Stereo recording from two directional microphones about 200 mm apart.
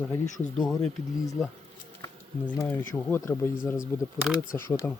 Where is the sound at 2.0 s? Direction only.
20° left (ahead or behind).